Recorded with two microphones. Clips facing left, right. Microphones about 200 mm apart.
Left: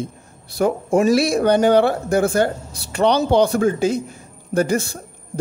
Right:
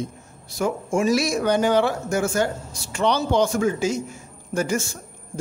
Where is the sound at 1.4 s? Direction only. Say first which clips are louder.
Left 5 dB; 60° left (ahead or behind).